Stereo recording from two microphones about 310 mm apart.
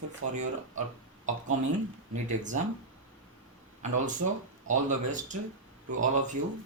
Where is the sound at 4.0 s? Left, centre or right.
Right.